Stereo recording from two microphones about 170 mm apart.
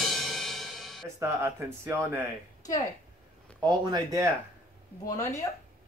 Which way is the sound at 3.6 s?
20° right (ahead or behind).